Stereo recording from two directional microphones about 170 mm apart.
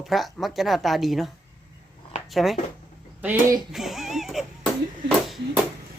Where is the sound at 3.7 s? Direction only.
Centre (ahead or behind).